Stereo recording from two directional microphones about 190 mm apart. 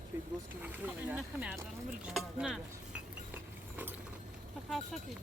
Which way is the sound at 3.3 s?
10° right (ahead or behind).